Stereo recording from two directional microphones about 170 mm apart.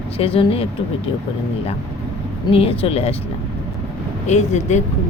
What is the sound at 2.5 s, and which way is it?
Speech, 35° left (ahead or behind).